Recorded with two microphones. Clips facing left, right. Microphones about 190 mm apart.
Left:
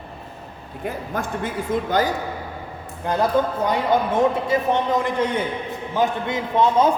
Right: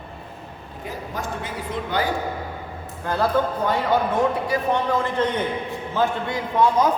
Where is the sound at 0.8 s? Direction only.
55° left (ahead or behind).